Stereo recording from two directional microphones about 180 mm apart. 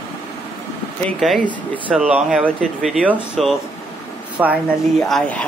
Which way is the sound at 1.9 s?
5° right (ahead or behind).